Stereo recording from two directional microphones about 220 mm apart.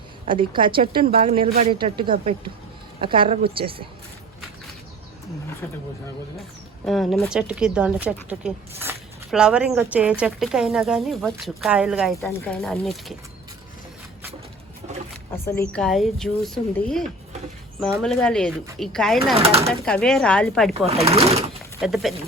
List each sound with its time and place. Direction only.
0.3 s speech: 20° right (ahead or behind)
6.8 s speech: centre (ahead or behind)
15.7 s speech: centre (ahead or behind)
19.4 s speech: 25° right (ahead or behind)
19.8 s speech: 5° left (ahead or behind)
20.8 s speech: 25° right (ahead or behind)
21.8 s speech: centre (ahead or behind)